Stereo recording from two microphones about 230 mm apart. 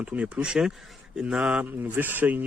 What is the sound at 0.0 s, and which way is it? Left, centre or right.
Speech, centre.